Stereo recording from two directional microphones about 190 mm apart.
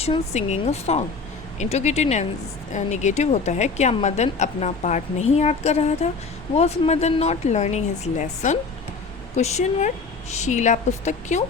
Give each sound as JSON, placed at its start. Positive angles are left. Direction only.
{"t": 0.0, "sound": "a woman's voice", "side_deg": 35}